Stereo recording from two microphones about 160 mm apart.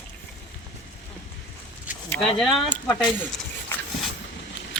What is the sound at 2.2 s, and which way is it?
Speech, centre (ahead or behind).